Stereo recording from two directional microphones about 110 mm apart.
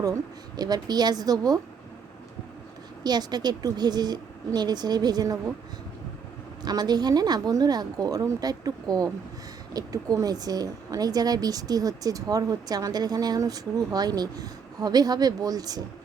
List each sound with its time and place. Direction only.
0.0 s speech: 35° right (ahead or behind)
3.0 s speech: 40° right (ahead or behind)
6.6 s speech: 40° right (ahead or behind)